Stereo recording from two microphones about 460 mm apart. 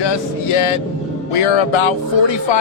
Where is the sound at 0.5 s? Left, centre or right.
Left.